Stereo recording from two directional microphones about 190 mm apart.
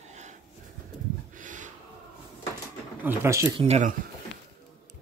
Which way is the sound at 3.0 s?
10° right (ahead or behind).